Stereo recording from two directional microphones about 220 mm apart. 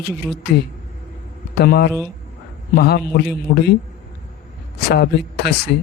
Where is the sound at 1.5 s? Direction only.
45° left (ahead or behind).